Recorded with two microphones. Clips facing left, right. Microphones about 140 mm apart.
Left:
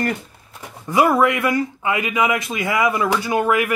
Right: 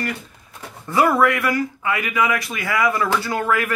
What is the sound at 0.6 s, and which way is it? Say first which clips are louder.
Speech: left 1 dB; 15° left (ahead or behind).